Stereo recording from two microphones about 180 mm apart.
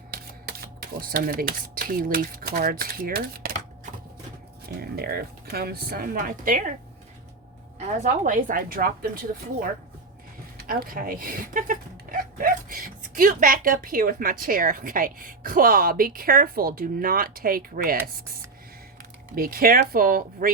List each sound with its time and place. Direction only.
0.9 s speech: 55° right (ahead or behind)
4.8 s speech: 60° right (ahead or behind)
7.8 s speech: 40° right (ahead or behind)
10.6 s speech: 55° right (ahead or behind)
19.4 s speech: 55° right (ahead or behind)